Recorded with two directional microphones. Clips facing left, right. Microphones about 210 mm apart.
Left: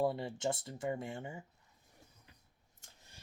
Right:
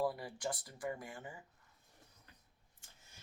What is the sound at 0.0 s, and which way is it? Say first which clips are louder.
Speech: left 4 dB; 25° left (ahead or behind).